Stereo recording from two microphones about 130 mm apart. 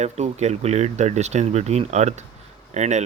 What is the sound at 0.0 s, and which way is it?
Speech, 60° right (ahead or behind).